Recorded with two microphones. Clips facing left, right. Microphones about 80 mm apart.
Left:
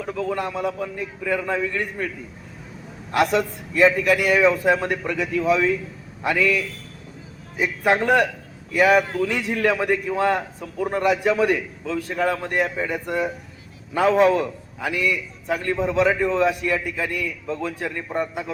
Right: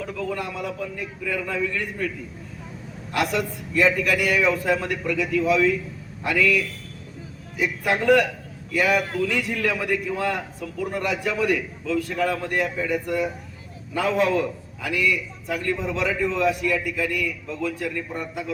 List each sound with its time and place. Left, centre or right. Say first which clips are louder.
0.0 s a man's voice: left 3 dB; left
3.1 s a man's voice: left 4 dB; left